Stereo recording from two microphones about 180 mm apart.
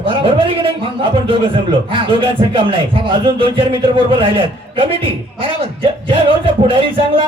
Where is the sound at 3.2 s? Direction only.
30° right (ahead or behind).